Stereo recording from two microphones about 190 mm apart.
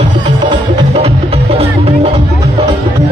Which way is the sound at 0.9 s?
30° right (ahead or behind).